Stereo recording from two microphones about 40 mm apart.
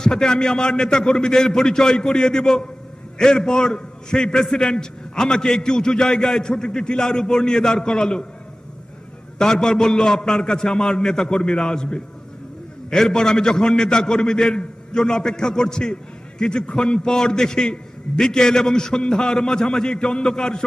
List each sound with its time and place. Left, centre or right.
0.0 s a man's voice: centre
9.4 s a man's voice: centre